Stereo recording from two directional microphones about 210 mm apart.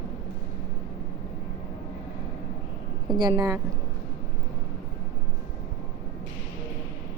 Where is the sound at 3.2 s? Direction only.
20° right (ahead or behind).